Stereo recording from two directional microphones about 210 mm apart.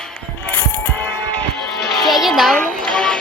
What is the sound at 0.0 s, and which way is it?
Music, 10° left (ahead or behind).